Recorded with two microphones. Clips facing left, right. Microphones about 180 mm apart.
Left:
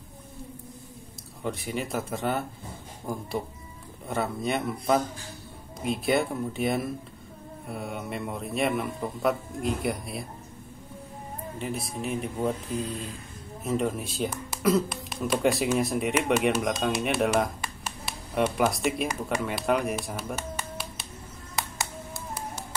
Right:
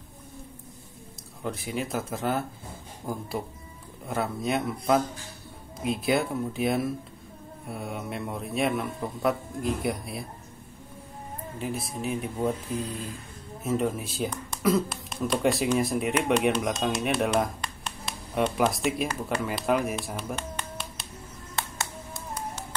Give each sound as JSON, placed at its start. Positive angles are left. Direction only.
{"t": 1.4, "sound": "speech", "side_deg": 0}
{"t": 11.5, "sound": "speech", "side_deg": 0}
{"t": 21.5, "sound": "music", "side_deg": 0}